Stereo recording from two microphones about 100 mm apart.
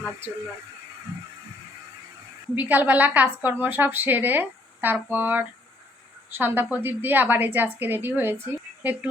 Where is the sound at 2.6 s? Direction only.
15° right (ahead or behind).